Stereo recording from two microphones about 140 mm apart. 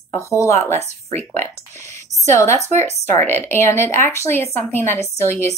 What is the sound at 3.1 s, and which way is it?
A woman's voice, 15° left (ahead or behind).